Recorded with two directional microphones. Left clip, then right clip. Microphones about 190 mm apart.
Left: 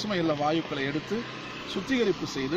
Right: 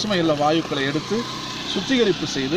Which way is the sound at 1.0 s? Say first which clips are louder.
Right 8 dB; 65° right (ahead or behind).